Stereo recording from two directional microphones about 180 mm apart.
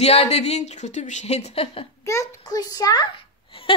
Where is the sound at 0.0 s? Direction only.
35° left (ahead or behind).